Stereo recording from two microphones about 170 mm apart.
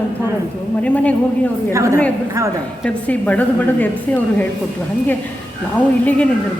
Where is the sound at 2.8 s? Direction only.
10° left (ahead or behind).